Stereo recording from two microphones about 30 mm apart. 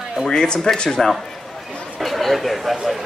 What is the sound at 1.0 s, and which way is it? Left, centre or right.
Speech, centre.